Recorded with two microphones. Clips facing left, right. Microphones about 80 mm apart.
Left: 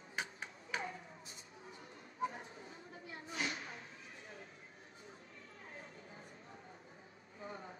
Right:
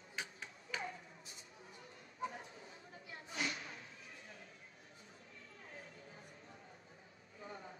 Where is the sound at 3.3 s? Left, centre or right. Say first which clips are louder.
Left 1 dB; left.